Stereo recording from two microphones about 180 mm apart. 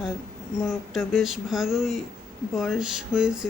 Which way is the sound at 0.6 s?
5° right (ahead or behind).